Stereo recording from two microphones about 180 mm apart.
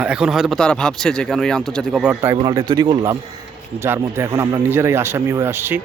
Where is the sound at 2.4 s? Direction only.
20° right (ahead or behind).